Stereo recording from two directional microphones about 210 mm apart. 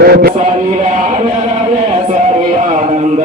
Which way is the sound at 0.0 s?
45° right (ahead or behind).